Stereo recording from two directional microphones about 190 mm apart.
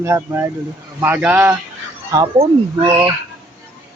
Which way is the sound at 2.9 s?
15° right (ahead or behind).